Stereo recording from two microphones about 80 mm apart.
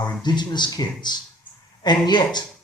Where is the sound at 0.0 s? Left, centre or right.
Left.